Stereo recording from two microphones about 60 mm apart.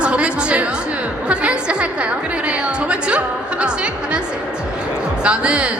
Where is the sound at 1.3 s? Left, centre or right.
Centre.